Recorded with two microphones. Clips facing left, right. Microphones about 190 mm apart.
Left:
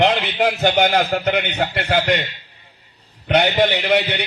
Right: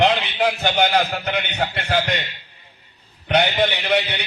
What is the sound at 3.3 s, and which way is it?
Speech, 55° left (ahead or behind).